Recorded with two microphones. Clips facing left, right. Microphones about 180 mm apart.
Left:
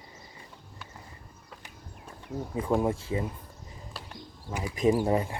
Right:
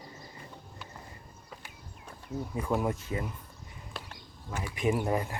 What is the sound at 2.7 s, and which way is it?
Speech, 30° left (ahead or behind).